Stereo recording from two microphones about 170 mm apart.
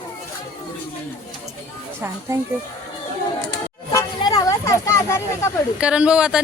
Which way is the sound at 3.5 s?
20° left (ahead or behind).